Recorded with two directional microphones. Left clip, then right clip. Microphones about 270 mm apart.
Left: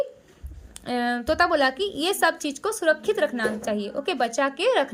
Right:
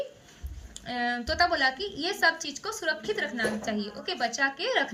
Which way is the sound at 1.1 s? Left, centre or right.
Centre.